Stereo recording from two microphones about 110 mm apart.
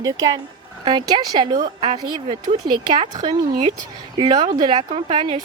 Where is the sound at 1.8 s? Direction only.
60° right (ahead or behind).